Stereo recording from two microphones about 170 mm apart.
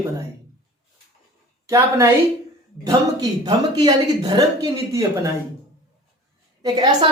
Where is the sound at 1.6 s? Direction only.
15° right (ahead or behind).